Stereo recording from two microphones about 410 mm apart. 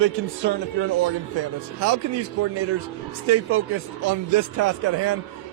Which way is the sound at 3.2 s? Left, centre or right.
Right.